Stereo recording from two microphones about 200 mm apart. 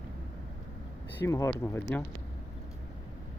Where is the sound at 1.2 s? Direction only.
15° left (ahead or behind).